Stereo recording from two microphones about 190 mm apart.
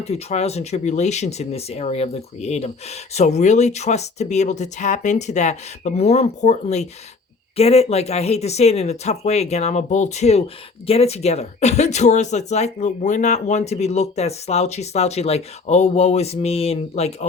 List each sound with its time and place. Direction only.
0.0 s speech: 35° left (ahead or behind)